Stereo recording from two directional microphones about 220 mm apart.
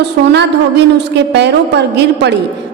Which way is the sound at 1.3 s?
50° right (ahead or behind).